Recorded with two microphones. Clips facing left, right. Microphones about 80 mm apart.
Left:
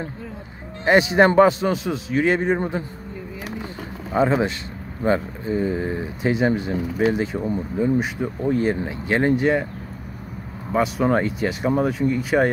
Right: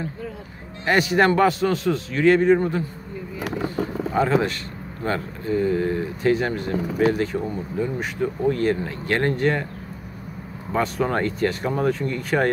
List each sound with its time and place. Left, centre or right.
0.8 s a man's voice: left
4.1 s a man's voice: centre
10.7 s speech: centre